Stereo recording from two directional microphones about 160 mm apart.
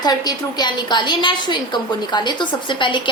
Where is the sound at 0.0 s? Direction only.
25° left (ahead or behind).